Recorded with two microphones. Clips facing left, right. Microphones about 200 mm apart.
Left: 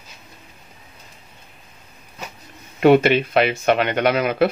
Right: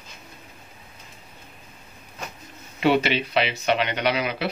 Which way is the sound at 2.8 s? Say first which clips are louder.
Left 7 dB; 50° left (ahead or behind).